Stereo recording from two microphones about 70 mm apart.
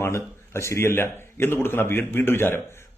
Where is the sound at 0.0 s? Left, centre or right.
Left.